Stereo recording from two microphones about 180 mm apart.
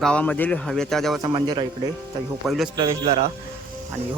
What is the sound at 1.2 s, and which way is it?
Speech, 25° right (ahead or behind).